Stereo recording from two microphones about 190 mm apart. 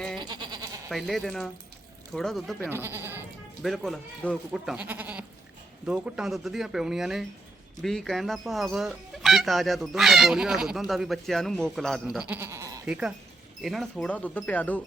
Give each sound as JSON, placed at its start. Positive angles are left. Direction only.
{"t": 0.2, "sound": "goat", "side_deg": -25}
{"t": 0.9, "sound": "speech", "side_deg": 0}
{"t": 2.7, "sound": "speech", "side_deg": -10}
{"t": 3.6, "sound": "speech", "side_deg": 0}
{"t": 12.8, "sound": "speech", "side_deg": -5}